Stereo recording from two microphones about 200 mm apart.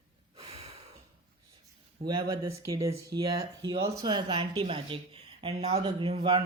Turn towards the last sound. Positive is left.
turn(degrees=-25)  # may be behind; listen again after turning